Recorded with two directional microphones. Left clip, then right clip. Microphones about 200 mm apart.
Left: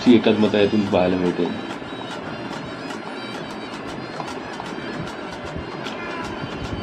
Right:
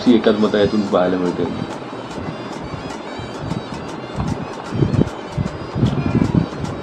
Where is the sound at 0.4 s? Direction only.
Centre (ahead or behind).